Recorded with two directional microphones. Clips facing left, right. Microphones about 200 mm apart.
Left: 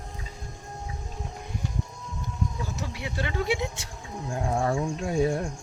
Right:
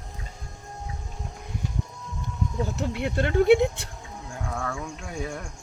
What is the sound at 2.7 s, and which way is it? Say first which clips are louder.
Speech: right 7 dB; 55° right (ahead or behind).